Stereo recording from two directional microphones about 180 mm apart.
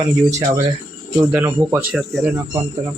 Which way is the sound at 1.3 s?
10° right (ahead or behind).